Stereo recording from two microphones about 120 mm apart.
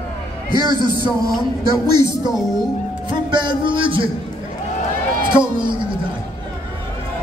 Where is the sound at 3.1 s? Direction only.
40° right (ahead or behind).